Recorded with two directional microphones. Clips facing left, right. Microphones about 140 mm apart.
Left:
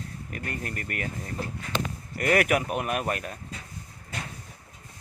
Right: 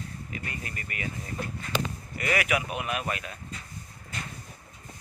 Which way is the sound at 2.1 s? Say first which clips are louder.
Left 5 dB; 50° left (ahead or behind).